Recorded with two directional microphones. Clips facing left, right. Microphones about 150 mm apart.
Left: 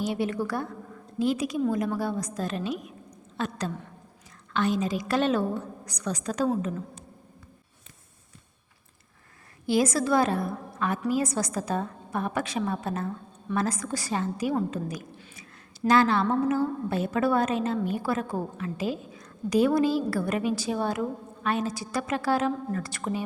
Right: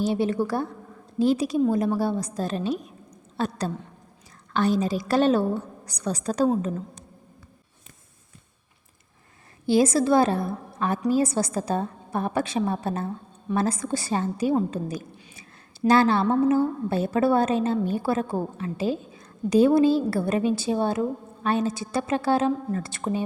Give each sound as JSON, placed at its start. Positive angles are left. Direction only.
{"t": 0.0, "sound": "a woman's voice", "side_deg": -30}
{"t": 9.6, "sound": "a woman's voice", "side_deg": -30}